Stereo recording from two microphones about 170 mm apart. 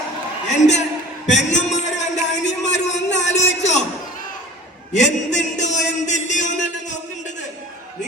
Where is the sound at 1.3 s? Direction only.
45° left (ahead or behind).